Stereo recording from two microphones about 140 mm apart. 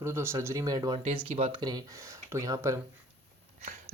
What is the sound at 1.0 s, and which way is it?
Speech, 40° right (ahead or behind).